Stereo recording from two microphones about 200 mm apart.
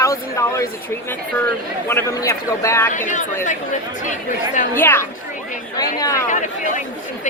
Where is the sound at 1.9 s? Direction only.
15° left (ahead or behind).